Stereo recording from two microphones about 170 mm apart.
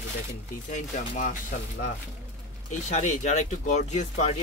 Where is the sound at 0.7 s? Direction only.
45° left (ahead or behind).